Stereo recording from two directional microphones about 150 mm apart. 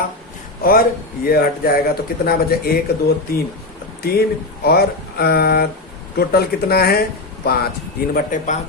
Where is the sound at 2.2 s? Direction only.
90° left.